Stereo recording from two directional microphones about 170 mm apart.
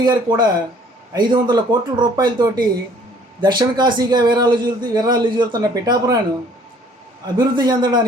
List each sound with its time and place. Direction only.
0.0 s a man's voice: 25° right (ahead or behind)
7.3 s a man's voice: 25° right (ahead or behind)